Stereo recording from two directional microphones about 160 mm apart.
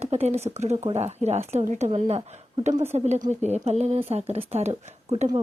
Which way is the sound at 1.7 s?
45° right (ahead or behind).